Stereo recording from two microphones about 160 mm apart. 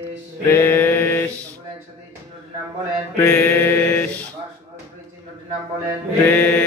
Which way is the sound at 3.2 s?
20° left (ahead or behind).